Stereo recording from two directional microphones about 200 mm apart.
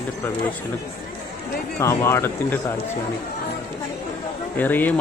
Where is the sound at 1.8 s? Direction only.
10° left (ahead or behind).